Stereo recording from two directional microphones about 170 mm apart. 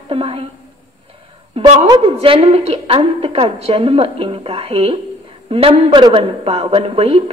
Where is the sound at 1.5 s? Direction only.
35° right (ahead or behind).